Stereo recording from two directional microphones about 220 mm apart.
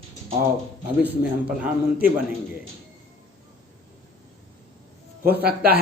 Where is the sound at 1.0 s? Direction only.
5° right (ahead or behind).